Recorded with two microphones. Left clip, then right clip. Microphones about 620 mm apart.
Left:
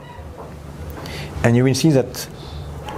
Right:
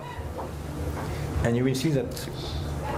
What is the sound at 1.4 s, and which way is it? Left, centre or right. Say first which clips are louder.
Speech: left 9 dB; left.